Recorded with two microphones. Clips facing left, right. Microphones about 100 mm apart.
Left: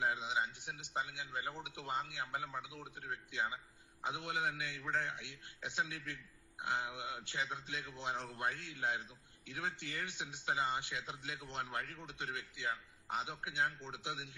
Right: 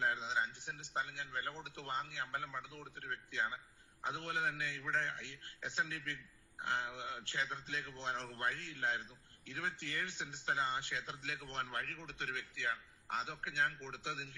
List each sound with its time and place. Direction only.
0.0 s a man's voice: 15° left (ahead or behind)